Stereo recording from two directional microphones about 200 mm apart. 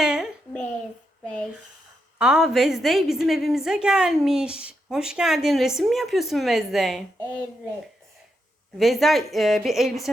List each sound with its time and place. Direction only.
0.0 s a sound: 5° right (ahead or behind)
1.2 s a woman's voice: 5° left (ahead or behind)
8.8 s a woman's voice: centre (ahead or behind)